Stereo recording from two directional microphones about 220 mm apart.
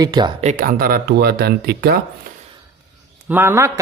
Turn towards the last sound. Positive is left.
turn(degrees=-10)  # may be behind; listen again after turning